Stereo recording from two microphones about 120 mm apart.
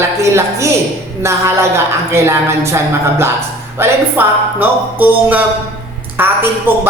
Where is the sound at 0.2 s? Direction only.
25° right (ahead or behind).